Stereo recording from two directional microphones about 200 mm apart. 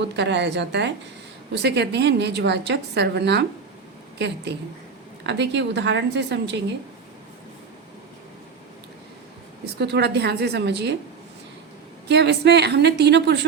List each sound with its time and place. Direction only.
0.0 s a woman's voice: 60° right (ahead or behind)
4.5 s a woman's voice: 60° right (ahead or behind)
9.7 s a woman's voice: 55° right (ahead or behind)
12.0 s a woman's voice: 55° right (ahead or behind)